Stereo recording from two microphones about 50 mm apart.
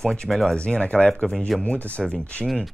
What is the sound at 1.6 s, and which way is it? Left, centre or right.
Speech, left.